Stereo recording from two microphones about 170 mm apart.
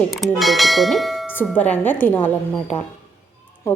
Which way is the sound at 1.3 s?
10° left (ahead or behind).